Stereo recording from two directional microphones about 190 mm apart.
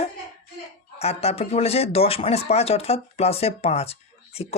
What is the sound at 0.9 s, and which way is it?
Speech, 35° left (ahead or behind).